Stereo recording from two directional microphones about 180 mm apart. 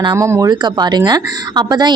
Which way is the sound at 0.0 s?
20° right (ahead or behind).